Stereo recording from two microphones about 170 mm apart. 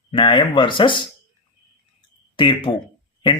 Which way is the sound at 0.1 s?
30° left (ahead or behind).